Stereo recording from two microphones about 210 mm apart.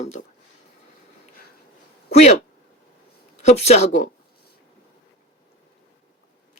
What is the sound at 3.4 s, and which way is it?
Speech, 30° left (ahead or behind).